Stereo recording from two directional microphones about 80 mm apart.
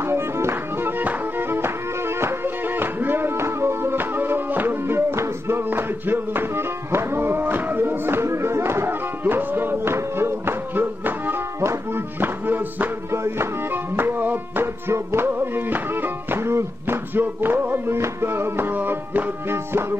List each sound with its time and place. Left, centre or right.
0.0 s music: right